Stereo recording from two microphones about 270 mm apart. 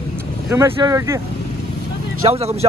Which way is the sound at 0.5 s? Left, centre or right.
Centre.